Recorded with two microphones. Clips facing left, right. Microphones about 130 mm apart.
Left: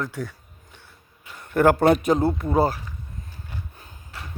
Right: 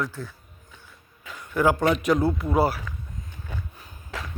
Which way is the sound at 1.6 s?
55° left (ahead or behind).